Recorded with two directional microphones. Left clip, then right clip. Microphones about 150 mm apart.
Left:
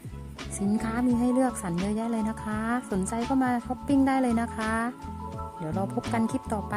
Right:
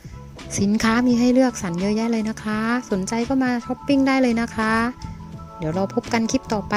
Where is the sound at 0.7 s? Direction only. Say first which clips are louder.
Right 9 dB; 55° right (ahead or behind); by 4.3 s 35° right (ahead or behind).